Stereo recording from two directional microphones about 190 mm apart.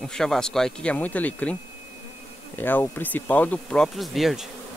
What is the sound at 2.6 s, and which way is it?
Speech, 10° left (ahead or behind).